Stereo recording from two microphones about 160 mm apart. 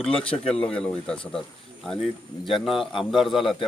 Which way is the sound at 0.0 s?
5° left (ahead or behind).